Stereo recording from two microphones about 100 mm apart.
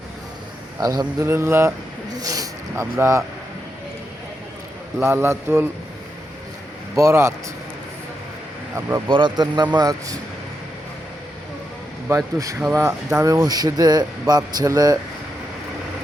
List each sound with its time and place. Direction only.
0.8 s a man's voice: 35° right (ahead or behind)
1.3 s a man's voice: 25° right (ahead or behind)
2.0 s a sound: 35° right (ahead or behind)
3.0 s a man's voice: 30° right (ahead or behind)
4.9 s a man's voice: 25° right (ahead or behind)
6.9 s a man's voice: 30° right (ahead or behind)
9.0 s speech: 55° right (ahead or behind)
12.0 s a man's voice: 35° right (ahead or behind)